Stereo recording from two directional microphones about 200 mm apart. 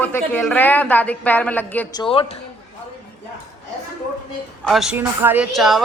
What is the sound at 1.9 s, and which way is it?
Speech, 25° left (ahead or behind).